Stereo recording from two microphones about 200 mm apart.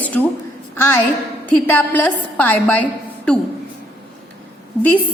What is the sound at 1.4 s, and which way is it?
A woman's voice, 10° left (ahead or behind).